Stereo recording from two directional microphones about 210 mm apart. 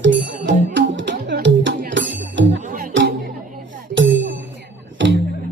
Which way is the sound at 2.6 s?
40° right (ahead or behind).